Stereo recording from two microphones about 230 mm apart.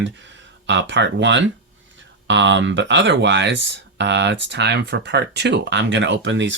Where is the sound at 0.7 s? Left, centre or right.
Right.